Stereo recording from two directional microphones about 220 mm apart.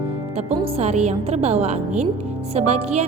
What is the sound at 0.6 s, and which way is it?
A woman's voice, 30° right (ahead or behind).